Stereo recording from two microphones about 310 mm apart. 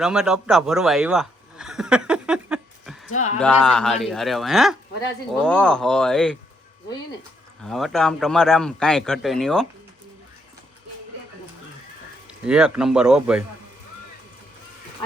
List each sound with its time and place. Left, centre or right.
0.0 s a sound: centre
3.1 s speech: left
3.4 s a man's voice: centre
7.6 s a man's voice: centre
12.3 s a man's voice: centre